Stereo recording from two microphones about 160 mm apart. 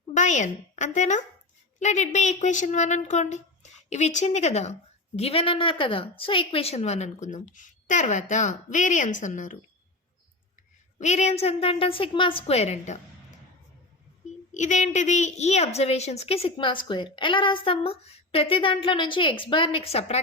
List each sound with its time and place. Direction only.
0.1 s a woman's voice: 50° left (ahead or behind)
10.9 s a woman's voice: 45° left (ahead or behind)
14.5 s a woman's voice: 50° left (ahead or behind)